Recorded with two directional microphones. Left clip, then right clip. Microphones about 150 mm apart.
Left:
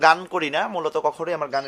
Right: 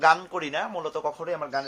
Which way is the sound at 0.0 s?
55° left (ahead or behind).